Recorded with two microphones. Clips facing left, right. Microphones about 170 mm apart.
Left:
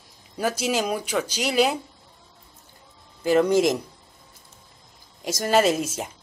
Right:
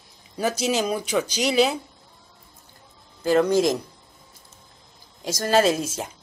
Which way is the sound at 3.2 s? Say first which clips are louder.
Even; 20° left (ahead or behind).